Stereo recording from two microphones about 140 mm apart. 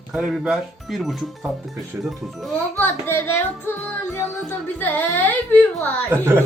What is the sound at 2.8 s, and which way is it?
Music, 15° left (ahead or behind).